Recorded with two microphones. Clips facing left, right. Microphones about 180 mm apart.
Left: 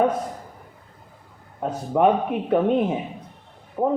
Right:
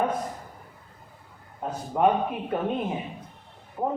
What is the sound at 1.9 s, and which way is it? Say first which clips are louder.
Speech: left 4 dB; 60° left (ahead or behind).